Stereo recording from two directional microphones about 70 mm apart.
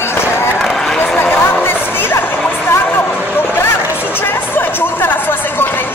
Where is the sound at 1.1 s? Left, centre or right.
Left.